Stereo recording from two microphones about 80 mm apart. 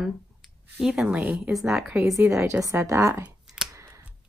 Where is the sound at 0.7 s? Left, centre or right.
Centre.